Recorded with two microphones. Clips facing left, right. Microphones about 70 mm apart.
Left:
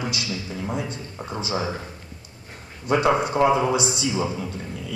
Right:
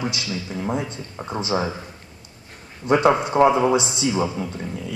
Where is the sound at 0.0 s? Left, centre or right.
Right.